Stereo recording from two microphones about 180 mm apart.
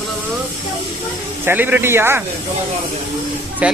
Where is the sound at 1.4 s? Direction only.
10° right (ahead or behind).